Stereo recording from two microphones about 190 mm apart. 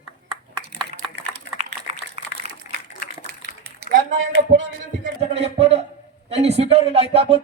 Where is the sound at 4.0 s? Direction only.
45° right (ahead or behind).